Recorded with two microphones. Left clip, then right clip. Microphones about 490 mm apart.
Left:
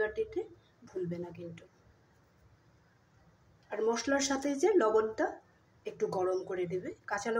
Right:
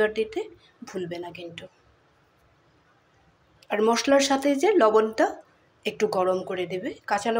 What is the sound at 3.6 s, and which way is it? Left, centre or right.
Speech, left.